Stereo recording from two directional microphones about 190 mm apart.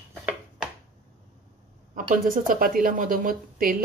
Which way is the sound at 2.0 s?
45° right (ahead or behind).